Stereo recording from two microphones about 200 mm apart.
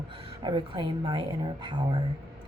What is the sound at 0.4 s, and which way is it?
A woman's voice, 25° right (ahead or behind).